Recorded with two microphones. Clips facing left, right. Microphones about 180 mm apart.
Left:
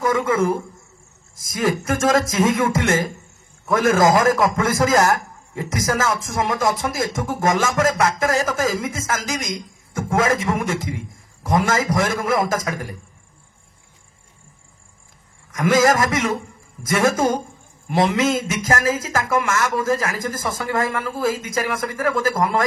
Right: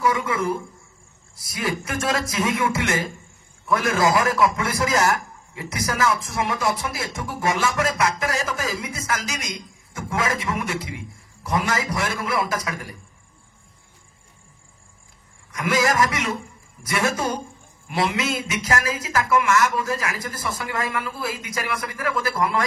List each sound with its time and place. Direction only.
0.0 s a man's voice: 45° left (ahead or behind)
15.5 s a man's voice: 45° left (ahead or behind)